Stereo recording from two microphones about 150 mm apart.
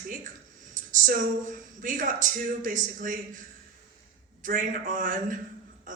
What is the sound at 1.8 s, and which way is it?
Speech, 60° right (ahead or behind).